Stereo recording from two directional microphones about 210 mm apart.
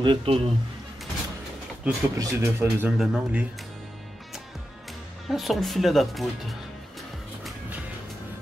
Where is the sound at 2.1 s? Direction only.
10° right (ahead or behind).